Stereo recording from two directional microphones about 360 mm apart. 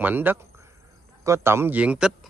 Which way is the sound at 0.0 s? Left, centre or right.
Centre.